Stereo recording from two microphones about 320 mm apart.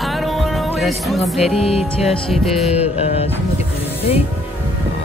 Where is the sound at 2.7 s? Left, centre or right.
Centre.